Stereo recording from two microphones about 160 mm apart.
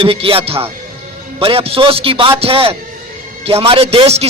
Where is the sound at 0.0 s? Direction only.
35° right (ahead or behind).